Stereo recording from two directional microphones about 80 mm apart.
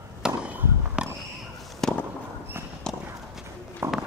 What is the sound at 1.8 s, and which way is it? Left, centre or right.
Fireworks, centre.